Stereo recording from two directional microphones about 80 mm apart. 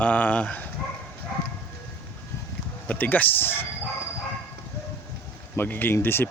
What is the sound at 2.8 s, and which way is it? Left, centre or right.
Speech, left.